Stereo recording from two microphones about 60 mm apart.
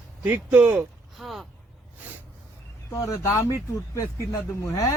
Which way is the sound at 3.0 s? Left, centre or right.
Left.